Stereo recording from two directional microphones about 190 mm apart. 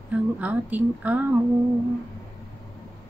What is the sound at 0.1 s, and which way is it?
Speech, 10° right (ahead or behind).